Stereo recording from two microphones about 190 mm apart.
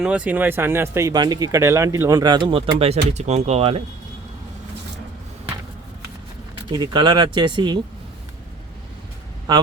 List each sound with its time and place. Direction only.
0.0 s speech: 5° right (ahead or behind); by 3.8 s 35° right (ahead or behind)
6.7 s speech: 25° right (ahead or behind)